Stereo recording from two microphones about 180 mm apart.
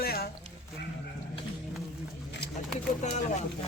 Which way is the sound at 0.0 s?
60° left (ahead or behind).